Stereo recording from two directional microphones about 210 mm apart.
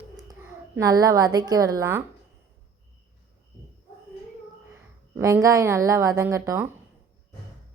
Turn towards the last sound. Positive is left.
turn(degrees=-10)  # may be behind; listen again after turning